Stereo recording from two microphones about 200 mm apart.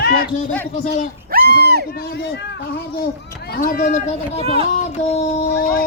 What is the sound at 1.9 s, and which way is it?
Speech, 55° left (ahead or behind).